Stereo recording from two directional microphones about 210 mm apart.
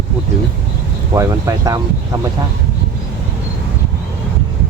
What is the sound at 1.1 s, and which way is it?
Speech, 15° right (ahead or behind).